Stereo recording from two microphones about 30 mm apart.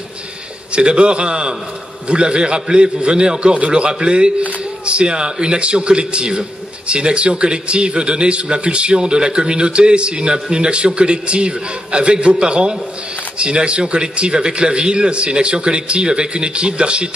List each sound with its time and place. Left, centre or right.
0.7 s a man's voice: right